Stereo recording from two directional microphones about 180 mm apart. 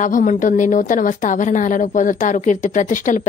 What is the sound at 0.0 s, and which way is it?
A woman's voice, 45° left (ahead or behind).